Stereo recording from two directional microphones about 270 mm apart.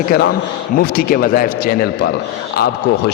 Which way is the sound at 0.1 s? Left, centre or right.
Left.